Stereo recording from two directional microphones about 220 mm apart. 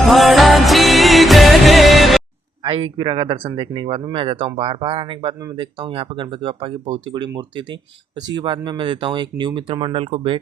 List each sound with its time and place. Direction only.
0.0 s music: centre (ahead or behind)
2.6 s speech: 25° right (ahead or behind)